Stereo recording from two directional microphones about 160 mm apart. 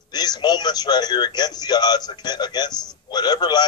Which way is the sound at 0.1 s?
25° left (ahead or behind).